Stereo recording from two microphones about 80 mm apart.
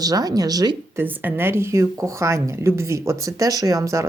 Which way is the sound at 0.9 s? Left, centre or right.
Right.